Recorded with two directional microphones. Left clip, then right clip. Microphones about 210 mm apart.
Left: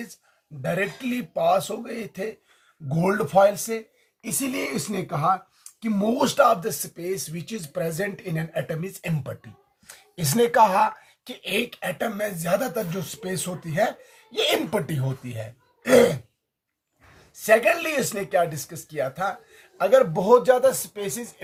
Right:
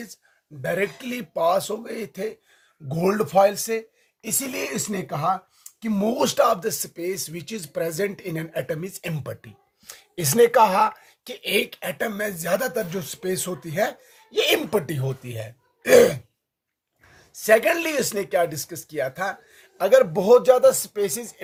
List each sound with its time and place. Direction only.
0.6 s speech: 40° right (ahead or behind)
17.4 s speech: 45° right (ahead or behind)